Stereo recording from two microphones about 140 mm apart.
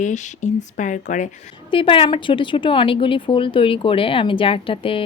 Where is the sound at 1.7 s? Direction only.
40° left (ahead or behind).